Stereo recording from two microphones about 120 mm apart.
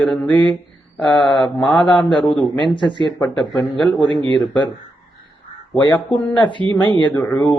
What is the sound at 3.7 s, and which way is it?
Speech, 40° right (ahead or behind).